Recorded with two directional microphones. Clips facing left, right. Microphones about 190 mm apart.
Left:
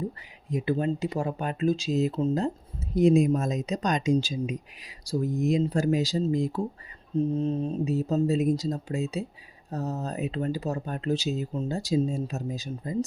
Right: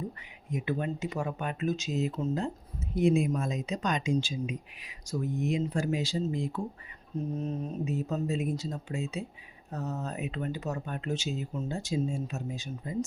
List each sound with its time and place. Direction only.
0.5 s speech: 35° left (ahead or behind)